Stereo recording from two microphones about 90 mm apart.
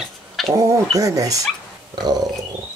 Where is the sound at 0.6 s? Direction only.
40° right (ahead or behind).